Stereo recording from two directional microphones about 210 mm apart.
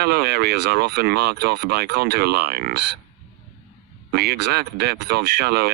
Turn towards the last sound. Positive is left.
turn(degrees=-50)  # may be behind; listen again after turning